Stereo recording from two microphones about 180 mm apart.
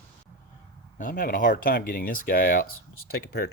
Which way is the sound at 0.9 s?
50° left (ahead or behind).